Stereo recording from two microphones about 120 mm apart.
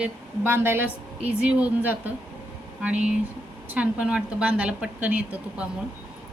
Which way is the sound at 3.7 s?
10° right (ahead or behind).